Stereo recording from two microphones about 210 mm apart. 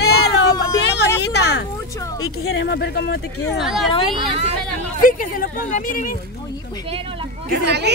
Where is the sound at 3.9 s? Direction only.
25° left (ahead or behind).